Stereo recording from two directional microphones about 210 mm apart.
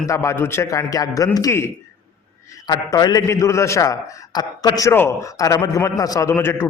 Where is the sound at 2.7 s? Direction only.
20° left (ahead or behind).